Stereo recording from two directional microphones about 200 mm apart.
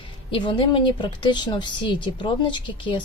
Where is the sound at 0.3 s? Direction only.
25° left (ahead or behind).